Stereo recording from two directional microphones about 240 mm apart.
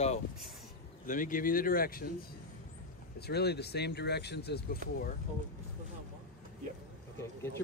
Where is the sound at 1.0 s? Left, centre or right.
Left.